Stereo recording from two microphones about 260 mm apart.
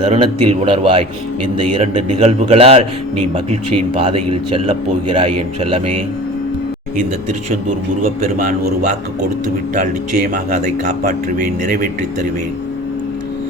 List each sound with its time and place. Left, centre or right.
0.1 s speech: right
8.4 s a man's voice: right